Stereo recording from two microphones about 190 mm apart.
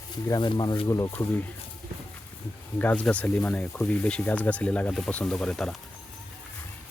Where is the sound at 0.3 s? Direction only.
25° left (ahead or behind).